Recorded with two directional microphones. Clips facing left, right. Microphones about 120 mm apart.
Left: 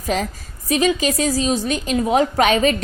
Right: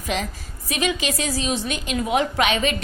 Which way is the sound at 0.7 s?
40° left (ahead or behind).